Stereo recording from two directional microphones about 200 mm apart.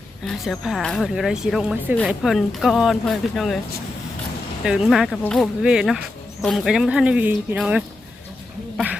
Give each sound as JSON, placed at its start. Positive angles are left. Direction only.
{"t": 0.3, "sound": "speech", "side_deg": 0}
{"t": 4.6, "sound": "speech", "side_deg": -5}